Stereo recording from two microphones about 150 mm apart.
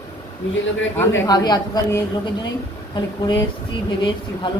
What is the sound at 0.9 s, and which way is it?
Speech, 25° left (ahead or behind).